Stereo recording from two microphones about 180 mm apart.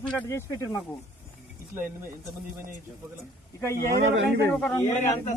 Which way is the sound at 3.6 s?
15° left (ahead or behind).